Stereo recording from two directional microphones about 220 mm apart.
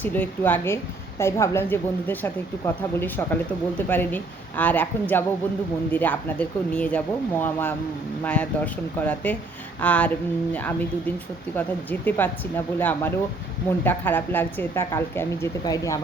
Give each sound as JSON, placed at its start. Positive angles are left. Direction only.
{"t": 0.0, "sound": "speech", "side_deg": 10}